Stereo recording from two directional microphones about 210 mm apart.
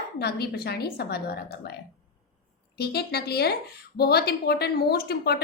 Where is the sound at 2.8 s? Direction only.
50° left (ahead or behind).